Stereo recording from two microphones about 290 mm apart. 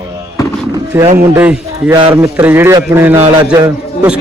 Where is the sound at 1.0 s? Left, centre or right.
Right.